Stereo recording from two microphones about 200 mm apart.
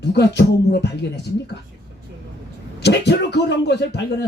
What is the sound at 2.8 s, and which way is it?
Speech, 60° left (ahead or behind).